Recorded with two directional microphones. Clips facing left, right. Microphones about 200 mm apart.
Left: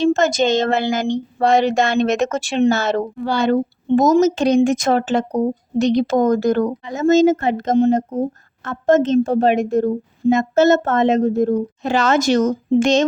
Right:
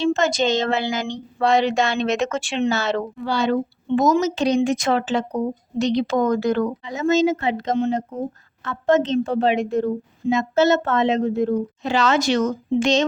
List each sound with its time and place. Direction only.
0.0 s speech: 45° left (ahead or behind)